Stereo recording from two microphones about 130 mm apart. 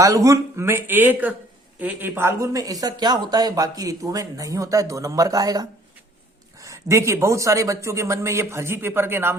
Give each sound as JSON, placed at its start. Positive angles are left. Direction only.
{"t": 0.0, "sound": "speech", "side_deg": -25}